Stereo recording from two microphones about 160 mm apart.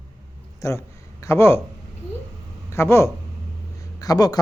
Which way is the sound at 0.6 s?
20° left (ahead or behind).